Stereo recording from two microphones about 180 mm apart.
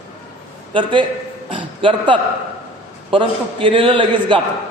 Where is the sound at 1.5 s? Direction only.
30° right (ahead or behind).